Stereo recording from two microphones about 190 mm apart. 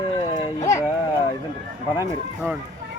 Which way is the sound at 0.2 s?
20° left (ahead or behind).